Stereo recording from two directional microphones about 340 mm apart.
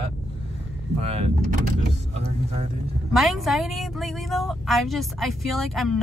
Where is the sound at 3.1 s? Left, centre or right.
Centre.